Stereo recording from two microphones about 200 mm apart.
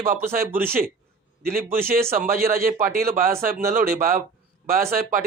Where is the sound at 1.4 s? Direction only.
45° right (ahead or behind).